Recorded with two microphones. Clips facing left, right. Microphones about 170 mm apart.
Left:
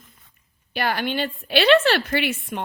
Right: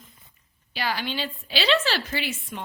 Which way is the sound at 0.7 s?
55° left (ahead or behind).